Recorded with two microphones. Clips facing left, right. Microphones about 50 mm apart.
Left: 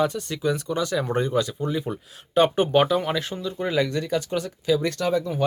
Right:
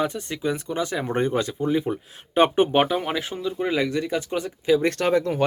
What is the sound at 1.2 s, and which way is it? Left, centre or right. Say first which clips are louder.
Speech: right 1 dB; right.